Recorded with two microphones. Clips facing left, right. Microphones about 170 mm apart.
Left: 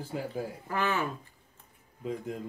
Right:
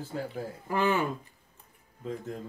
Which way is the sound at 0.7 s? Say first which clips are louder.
Right 4 dB; 15° right (ahead or behind).